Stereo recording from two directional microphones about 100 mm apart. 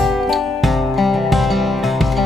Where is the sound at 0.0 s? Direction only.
Centre (ahead or behind).